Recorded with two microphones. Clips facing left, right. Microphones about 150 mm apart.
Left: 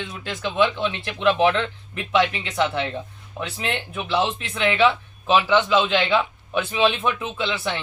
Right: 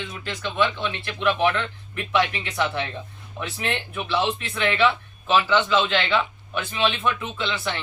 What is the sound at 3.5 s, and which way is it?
Speech, 20° left (ahead or behind).